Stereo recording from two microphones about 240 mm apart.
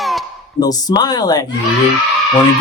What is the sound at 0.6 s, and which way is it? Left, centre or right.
Speech, centre.